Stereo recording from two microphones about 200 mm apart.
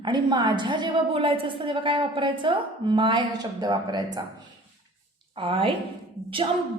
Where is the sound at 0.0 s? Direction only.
25° right (ahead or behind).